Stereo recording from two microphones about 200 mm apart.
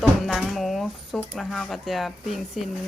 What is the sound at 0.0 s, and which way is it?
Speech, centre (ahead or behind).